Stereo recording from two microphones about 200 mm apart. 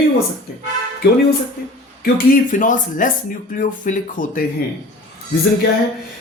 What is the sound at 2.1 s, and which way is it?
Speech, 45° left (ahead or behind).